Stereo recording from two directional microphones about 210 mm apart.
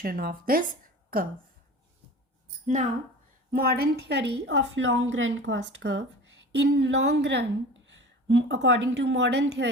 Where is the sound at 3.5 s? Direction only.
45° right (ahead or behind).